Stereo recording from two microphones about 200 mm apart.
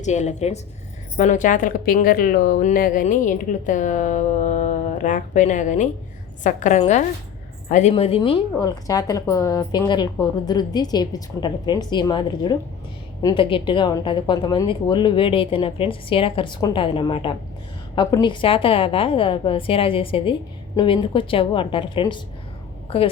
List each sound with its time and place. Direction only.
0.0 s a woman's voice: 35° left (ahead or behind)